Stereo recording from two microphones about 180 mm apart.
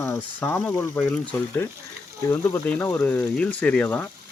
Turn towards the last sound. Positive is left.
turn(degrees=10)  # may be behind; listen again after turning